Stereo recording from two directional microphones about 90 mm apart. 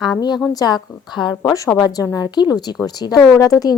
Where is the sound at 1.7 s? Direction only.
45° left (ahead or behind).